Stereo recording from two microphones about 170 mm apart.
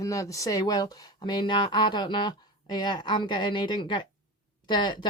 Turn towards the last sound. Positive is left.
turn(degrees=25)  # may be behind; listen again after turning